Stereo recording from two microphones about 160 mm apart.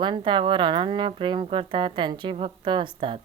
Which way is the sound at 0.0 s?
30° right (ahead or behind).